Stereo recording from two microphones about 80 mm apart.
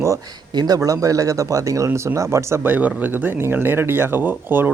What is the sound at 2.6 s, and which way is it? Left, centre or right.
Speech, right.